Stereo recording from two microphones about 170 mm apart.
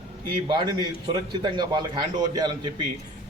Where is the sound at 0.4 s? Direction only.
25° right (ahead or behind).